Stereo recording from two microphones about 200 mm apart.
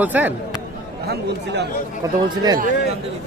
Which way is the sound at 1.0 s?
55° right (ahead or behind).